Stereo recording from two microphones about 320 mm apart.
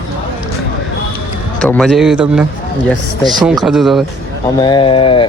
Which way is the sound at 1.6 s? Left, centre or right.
Centre.